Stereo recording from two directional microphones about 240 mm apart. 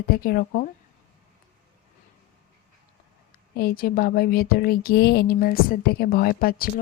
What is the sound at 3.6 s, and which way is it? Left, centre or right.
Speech, left.